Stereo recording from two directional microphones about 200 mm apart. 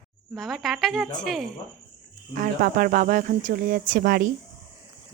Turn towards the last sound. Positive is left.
turn(degrees=-45)  # may be behind; listen again after turning